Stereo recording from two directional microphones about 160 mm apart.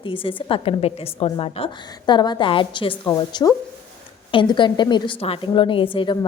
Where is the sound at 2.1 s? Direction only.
30° left (ahead or behind).